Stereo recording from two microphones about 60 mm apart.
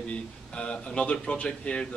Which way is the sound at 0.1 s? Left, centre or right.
Centre.